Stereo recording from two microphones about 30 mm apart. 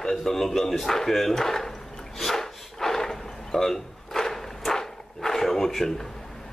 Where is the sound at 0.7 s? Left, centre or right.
Centre.